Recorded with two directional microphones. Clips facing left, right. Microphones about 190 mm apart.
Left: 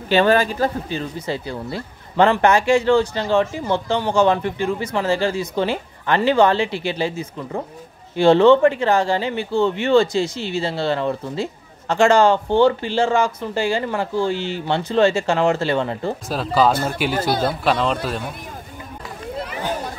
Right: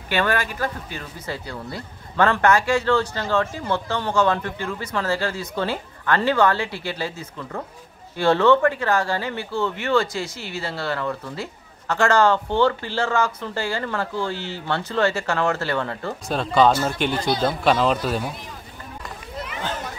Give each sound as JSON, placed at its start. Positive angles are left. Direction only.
{"t": 0.1, "sound": "speech", "side_deg": 30}
{"t": 16.3, "sound": "speech", "side_deg": 5}